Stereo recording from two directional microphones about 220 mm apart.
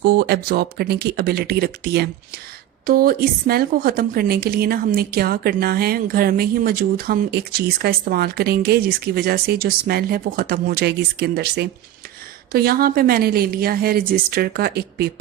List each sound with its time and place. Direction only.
0.0 s a woman's voice: 45° right (ahead or behind)